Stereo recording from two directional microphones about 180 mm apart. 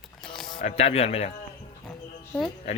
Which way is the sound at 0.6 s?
35° left (ahead or behind).